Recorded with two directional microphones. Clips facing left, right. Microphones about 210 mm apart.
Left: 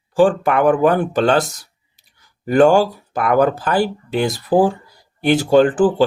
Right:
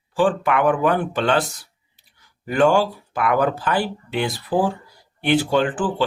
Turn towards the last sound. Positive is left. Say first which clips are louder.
# left 8 dB
turn(degrees=40)  # may be behind; listen again after turning